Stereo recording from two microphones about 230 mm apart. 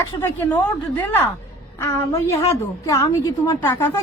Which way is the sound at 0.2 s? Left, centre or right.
Centre.